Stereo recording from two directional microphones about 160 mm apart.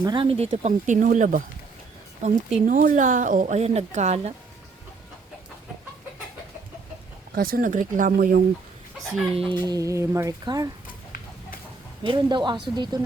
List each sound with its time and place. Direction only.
0.0 s a woman's voice: 30° right (ahead or behind)
2.6 s a woman's voice: 55° right (ahead or behind)
7.3 s speech: 65° right (ahead or behind)
9.3 s speech: 35° right (ahead or behind)
9.6 s speech: 20° right (ahead or behind)
12.0 s speech: 30° right (ahead or behind)